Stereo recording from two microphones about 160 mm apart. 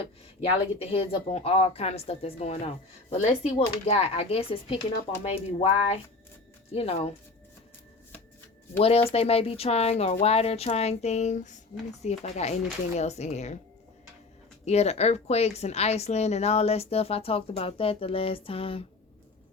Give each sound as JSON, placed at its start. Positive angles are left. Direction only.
{"t": 0.8, "sound": "speech", "side_deg": 40}
{"t": 8.8, "sound": "speech", "side_deg": 35}
{"t": 14.6, "sound": "speech", "side_deg": 40}